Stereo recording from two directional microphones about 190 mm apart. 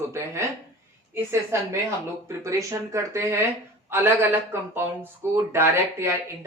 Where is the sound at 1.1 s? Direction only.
15° right (ahead or behind).